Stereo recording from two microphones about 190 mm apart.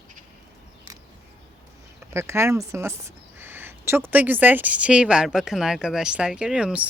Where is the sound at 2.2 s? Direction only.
15° right (ahead or behind).